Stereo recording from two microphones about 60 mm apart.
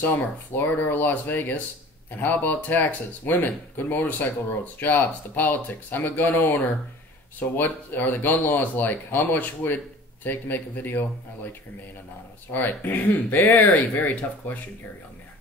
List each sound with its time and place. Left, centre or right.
0.0 s speech: left
12.4 s speech: left